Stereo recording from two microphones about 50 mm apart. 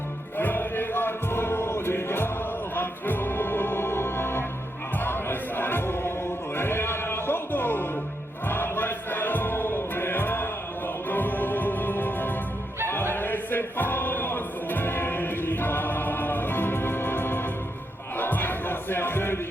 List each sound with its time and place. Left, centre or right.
0.3 s chant: left
2.7 s music: left
18.2 s battle cry: left